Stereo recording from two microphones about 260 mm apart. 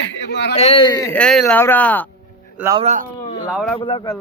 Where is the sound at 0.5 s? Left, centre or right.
Left; by 2.0 s centre.